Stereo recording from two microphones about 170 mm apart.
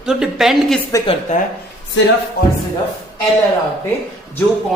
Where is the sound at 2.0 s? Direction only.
90° left.